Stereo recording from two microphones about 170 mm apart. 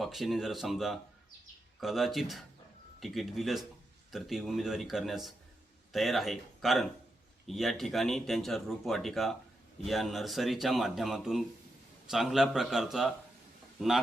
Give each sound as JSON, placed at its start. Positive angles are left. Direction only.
{"t": 0.0, "sound": "speech", "side_deg": 0}